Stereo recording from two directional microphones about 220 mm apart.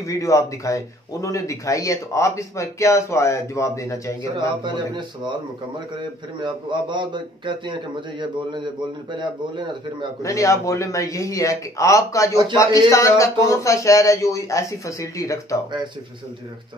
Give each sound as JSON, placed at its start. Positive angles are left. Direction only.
{"t": 0.0, "sound": "speech", "side_deg": 15}
{"t": 4.4, "sound": "a man's voice", "side_deg": -20}
{"t": 6.4, "sound": "a man's voice", "side_deg": -20}
{"t": 10.2, "sound": "speech", "side_deg": 15}